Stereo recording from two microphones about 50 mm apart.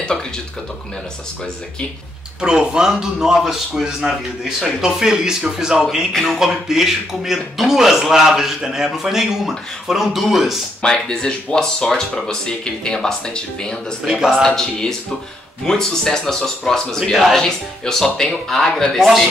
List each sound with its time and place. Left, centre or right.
2.4 s speech: centre
10.8 s speech: centre
14.0 s speech: centre
14.4 s speech: centre